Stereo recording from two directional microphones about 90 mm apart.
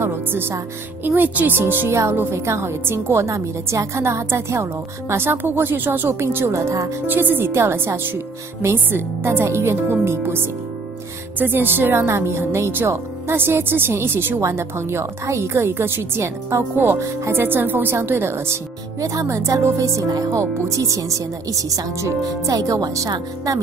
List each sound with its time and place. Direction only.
0.0 s speech: 25° right (ahead or behind)
7.1 s speech: 20° right (ahead or behind)
18.9 s speech: 35° right (ahead or behind)